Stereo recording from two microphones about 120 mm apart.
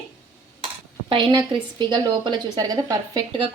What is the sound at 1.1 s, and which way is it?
A woman's voice, 45° right (ahead or behind).